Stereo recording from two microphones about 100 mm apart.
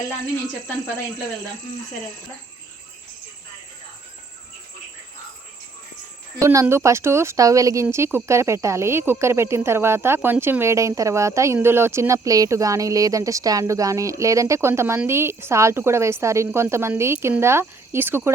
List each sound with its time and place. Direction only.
6.4 s speech: 30° right (ahead or behind)
10.2 s speech: 10° right (ahead or behind)
10.4 s speech: 25° right (ahead or behind)